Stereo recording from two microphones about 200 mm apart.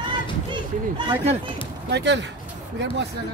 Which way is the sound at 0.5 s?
25° right (ahead or behind).